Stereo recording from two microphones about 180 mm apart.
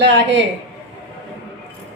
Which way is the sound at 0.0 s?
75° right (ahead or behind).